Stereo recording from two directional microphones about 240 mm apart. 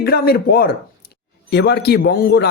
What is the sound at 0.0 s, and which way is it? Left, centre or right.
A man's voice, left.